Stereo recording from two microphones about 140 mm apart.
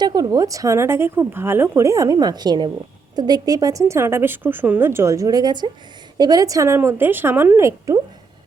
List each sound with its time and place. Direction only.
0.0 s speech: 30° right (ahead or behind)